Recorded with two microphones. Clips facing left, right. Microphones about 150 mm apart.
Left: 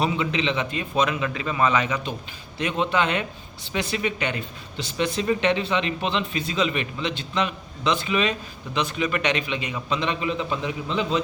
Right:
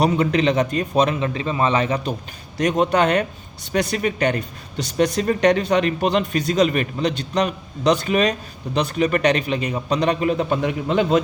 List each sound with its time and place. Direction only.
0.0 s a man's voice: 45° right (ahead or behind)